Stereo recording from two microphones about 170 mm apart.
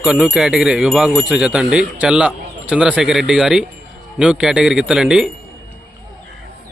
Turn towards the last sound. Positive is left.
turn(degrees=-5)  # may be behind; listen again after turning